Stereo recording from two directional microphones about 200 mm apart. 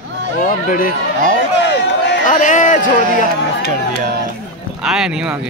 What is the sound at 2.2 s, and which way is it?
Speech, 40° left (ahead or behind).